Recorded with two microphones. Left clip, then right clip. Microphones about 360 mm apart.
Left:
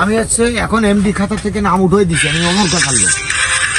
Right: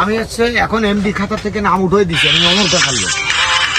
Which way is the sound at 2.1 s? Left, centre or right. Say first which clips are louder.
Right 3 dB; centre.